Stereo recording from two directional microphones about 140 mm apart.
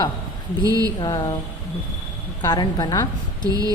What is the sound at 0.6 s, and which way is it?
Speech, 25° right (ahead or behind).